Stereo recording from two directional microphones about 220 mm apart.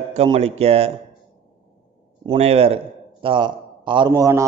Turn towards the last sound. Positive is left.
turn(degrees=-15)  # may be behind; listen again after turning